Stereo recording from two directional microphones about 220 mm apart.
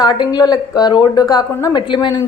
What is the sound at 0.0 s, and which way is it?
A woman's voice, 20° left (ahead or behind).